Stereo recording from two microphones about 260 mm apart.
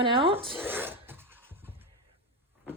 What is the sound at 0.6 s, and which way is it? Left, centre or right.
Filing, centre.